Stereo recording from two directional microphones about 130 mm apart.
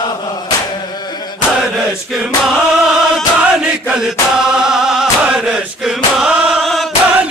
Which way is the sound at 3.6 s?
5° right (ahead or behind).